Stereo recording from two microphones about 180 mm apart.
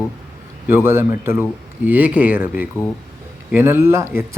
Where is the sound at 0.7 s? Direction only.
15° right (ahead or behind).